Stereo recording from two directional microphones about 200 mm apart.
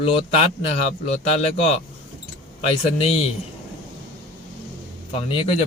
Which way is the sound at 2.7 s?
30° left (ahead or behind).